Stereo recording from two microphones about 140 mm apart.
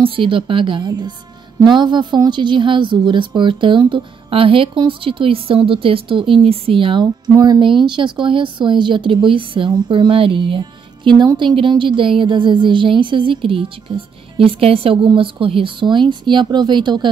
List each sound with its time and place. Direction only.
0.0 s a woman's voice: 40° right (ahead or behind)